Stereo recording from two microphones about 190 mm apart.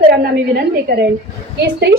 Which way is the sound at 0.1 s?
55° right (ahead or behind).